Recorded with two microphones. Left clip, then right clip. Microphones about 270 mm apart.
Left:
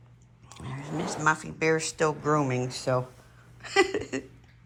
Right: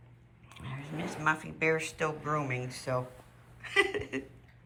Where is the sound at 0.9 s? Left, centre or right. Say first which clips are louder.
Left 7 dB; left.